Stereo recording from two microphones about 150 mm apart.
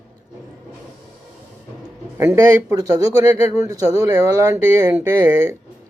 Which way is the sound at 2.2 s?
20° right (ahead or behind).